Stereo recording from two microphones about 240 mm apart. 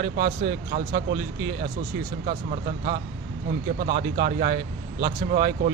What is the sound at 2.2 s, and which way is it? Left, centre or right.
Speech, right.